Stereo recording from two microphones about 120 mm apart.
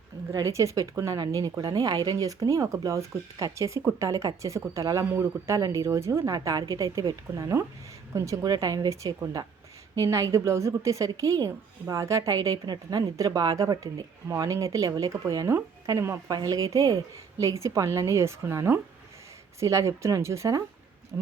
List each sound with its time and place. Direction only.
0.3 s speech: 25° right (ahead or behind)